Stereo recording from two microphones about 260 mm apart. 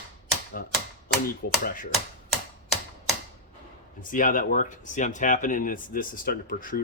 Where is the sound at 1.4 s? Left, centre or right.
Left.